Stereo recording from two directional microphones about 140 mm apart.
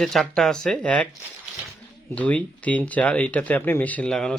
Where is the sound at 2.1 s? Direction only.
10° left (ahead or behind).